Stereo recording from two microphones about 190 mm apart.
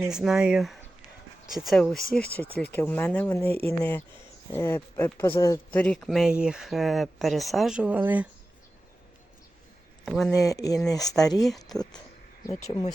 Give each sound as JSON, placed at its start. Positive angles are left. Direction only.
{"t": 0.0, "sound": "speech", "side_deg": -5}
{"t": 5.8, "sound": "speech", "side_deg": 5}
{"t": 10.1, "sound": "speech", "side_deg": 0}
{"t": 10.4, "sound": "speech", "side_deg": 20}
{"t": 10.9, "sound": "speech", "side_deg": 0}
{"t": 11.8, "sound": "speech", "side_deg": 20}
{"t": 12.5, "sound": "speech", "side_deg": 35}